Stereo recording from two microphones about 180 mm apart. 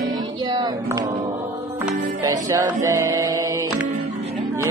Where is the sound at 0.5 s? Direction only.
25° right (ahead or behind).